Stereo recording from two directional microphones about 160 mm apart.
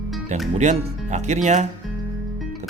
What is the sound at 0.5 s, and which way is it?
Speech, 45° right (ahead or behind).